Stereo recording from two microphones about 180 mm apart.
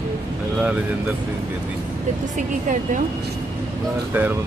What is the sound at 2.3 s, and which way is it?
Speech, 45° right (ahead or behind).